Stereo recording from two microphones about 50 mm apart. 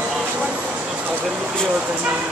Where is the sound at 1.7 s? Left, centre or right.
Right.